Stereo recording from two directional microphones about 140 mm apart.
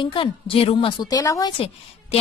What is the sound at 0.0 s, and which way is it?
A woman's voice, 40° left (ahead or behind).